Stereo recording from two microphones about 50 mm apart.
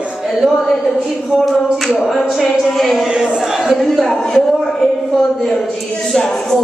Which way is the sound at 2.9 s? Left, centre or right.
Centre.